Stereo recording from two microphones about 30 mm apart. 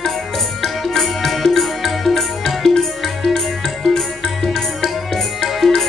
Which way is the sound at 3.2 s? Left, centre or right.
Centre.